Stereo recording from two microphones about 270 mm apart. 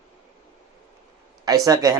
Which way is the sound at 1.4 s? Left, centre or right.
Centre.